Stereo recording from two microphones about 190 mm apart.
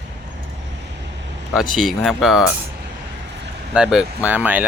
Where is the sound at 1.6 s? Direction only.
Centre (ahead or behind).